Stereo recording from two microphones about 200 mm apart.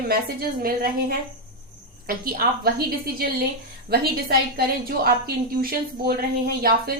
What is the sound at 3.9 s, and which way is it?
A woman's voice, 50° right (ahead or behind).